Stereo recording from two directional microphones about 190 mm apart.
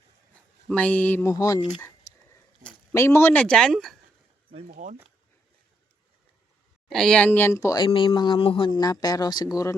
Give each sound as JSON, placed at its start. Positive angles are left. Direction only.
{"t": 0.7, "sound": "speech", "side_deg": 5}
{"t": 2.9, "sound": "speech", "side_deg": 15}
{"t": 4.7, "sound": "speech", "side_deg": -40}
{"t": 6.8, "sound": "speech", "side_deg": 5}